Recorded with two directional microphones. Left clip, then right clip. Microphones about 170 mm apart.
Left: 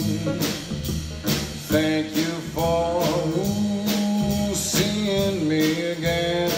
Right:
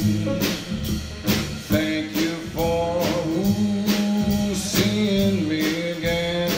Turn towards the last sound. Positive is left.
turn(degrees=40)  # may be behind; listen again after turning